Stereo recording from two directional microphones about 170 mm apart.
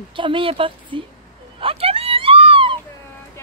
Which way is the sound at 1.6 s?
35° right (ahead or behind).